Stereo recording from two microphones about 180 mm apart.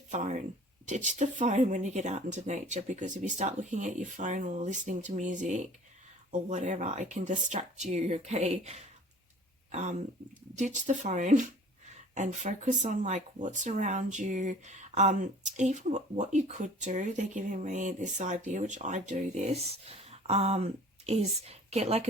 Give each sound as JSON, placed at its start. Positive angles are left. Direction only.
{"t": 0.1, "sound": "speech", "side_deg": -40}
{"t": 10.5, "sound": "a woman's voice", "side_deg": -40}